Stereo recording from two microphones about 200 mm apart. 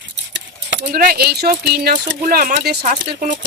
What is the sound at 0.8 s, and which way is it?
Speech, 45° right (ahead or behind).